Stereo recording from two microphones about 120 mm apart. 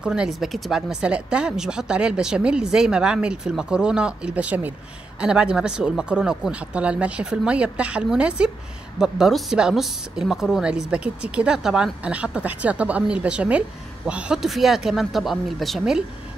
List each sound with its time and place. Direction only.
0.0 s speech: 5° right (ahead or behind)